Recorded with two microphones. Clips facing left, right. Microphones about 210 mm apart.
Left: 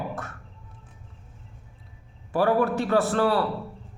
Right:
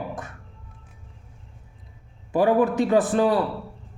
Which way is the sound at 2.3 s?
15° right (ahead or behind).